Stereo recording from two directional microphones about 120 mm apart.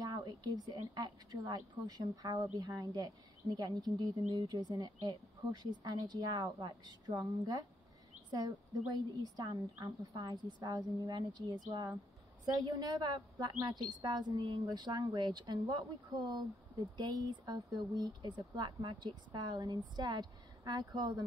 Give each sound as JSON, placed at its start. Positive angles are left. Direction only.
{"t": 0.0, "sound": "a woman's voice", "side_deg": -35}
{"t": 12.5, "sound": "a woman's voice", "side_deg": -35}